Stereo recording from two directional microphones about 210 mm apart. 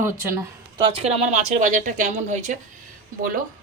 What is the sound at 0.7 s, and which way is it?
Speech, 25° right (ahead or behind).